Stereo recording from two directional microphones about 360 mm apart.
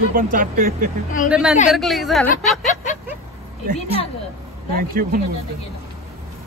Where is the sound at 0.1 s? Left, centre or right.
Right.